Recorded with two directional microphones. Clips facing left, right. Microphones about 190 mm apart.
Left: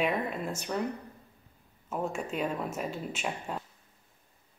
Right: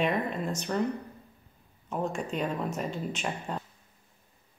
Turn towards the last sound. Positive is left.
turn(degrees=5)  # may be behind; listen again after turning